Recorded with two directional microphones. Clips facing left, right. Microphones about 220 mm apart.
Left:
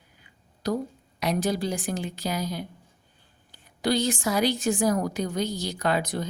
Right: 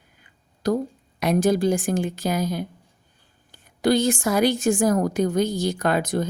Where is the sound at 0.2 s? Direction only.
50° right (ahead or behind).